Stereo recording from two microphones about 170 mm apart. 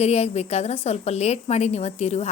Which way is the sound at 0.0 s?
40° left (ahead or behind).